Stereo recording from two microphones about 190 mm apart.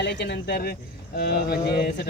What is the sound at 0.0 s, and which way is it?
A man's voice, 65° left (ahead or behind).